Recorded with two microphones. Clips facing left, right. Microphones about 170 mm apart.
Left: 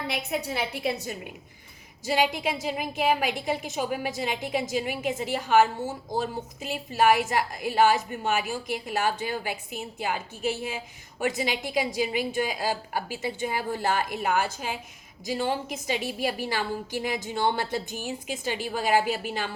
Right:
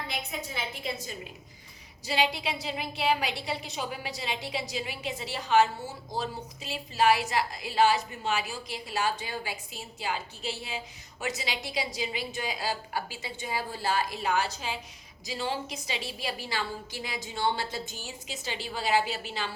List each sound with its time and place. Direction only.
0.1 s a woman's voice: 70° left (ahead or behind)
2.0 s a woman's voice: 50° left (ahead or behind)